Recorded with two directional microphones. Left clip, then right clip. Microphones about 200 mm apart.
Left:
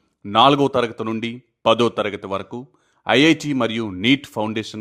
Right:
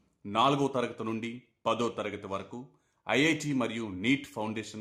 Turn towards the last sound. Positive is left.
turn(degrees=40)  # may be behind; listen again after turning